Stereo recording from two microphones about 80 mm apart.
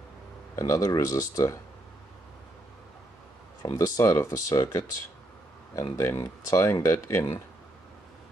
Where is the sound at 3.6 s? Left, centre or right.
Left.